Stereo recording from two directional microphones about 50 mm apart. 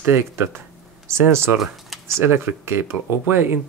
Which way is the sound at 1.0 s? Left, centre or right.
Right.